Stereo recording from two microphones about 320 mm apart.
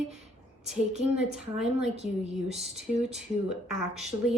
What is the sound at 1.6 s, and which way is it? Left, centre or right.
Speech, centre.